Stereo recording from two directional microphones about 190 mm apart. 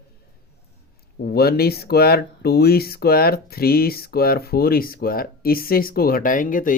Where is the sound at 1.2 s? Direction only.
55° left (ahead or behind).